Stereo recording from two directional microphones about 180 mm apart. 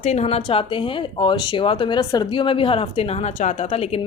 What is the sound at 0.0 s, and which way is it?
Speech, 35° left (ahead or behind).